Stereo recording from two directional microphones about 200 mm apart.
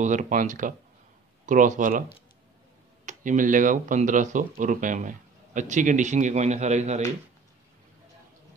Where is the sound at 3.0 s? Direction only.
40° right (ahead or behind).